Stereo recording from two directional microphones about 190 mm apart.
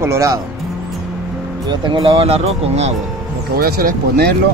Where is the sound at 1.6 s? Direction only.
25° right (ahead or behind).